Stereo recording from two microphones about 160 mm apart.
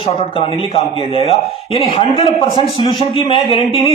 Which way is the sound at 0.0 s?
35° left (ahead or behind).